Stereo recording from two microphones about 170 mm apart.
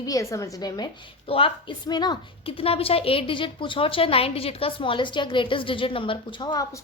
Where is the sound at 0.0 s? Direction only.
20° left (ahead or behind).